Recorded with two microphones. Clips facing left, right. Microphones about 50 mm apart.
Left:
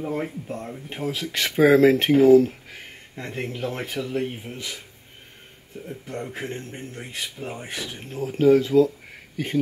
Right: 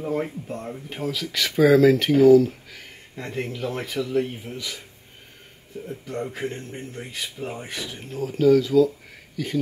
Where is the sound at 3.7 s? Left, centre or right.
Left.